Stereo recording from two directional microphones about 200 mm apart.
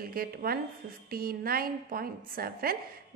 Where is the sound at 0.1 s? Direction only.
50° right (ahead or behind).